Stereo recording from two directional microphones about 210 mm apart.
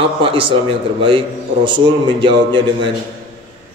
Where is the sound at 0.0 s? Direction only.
25° right (ahead or behind).